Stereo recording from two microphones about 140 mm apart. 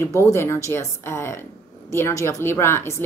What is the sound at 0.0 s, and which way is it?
A woman's voice, 20° left (ahead or behind).